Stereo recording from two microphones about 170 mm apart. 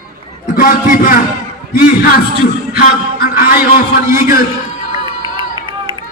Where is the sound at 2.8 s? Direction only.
55° left (ahead or behind).